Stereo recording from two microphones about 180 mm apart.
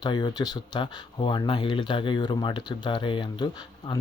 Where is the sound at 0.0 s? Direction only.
25° left (ahead or behind).